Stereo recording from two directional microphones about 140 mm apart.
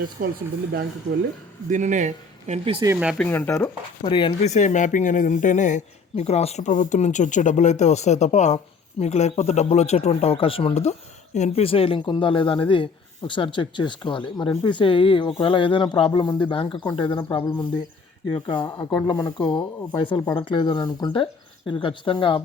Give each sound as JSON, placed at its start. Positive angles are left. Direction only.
{"t": 0.2, "sound": "speech", "side_deg": -85}
{"t": 1.7, "sound": "speech", "side_deg": -60}
{"t": 3.2, "sound": "speech", "side_deg": 10}
{"t": 4.0, "sound": "speech", "side_deg": 35}
{"t": 4.4, "sound": "speech", "side_deg": 60}
{"t": 18.3, "sound": "speech", "side_deg": 35}